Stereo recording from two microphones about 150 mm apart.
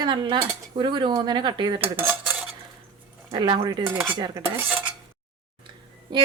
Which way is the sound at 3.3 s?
30° right (ahead or behind).